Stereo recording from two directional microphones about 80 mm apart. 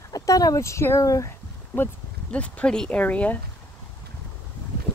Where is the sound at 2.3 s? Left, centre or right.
Centre.